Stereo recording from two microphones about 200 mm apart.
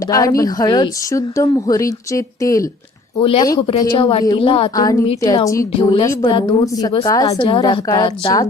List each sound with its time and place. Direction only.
0.1 s speech: 15° left (ahead or behind)
3.2 s a woman's voice: 30° left (ahead or behind)